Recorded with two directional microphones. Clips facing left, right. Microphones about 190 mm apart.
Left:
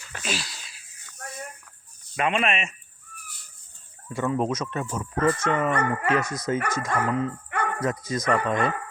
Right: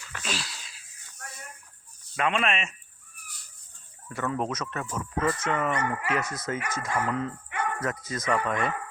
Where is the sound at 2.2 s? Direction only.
5° left (ahead or behind).